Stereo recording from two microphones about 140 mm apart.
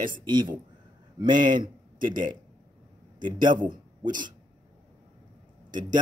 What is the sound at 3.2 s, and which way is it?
A man's voice, 35° right (ahead or behind).